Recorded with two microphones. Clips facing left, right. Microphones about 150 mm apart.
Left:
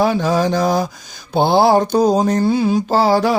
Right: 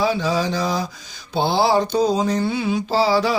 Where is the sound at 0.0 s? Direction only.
50° left (ahead or behind).